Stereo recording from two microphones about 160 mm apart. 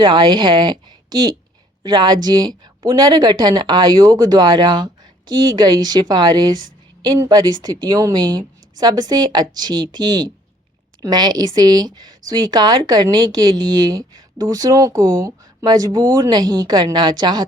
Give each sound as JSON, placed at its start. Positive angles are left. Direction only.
{"t": 0.0, "sound": "speech", "side_deg": -25}
{"t": 1.8, "sound": "speech", "side_deg": -25}